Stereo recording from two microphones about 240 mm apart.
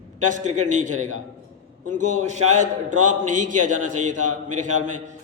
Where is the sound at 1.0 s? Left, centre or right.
Right.